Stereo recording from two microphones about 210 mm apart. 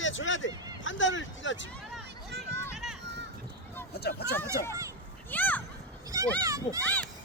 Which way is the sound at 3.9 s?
50° left (ahead or behind).